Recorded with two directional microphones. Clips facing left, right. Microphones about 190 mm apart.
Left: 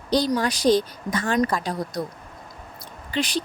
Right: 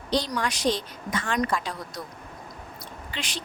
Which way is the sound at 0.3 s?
35° left (ahead or behind).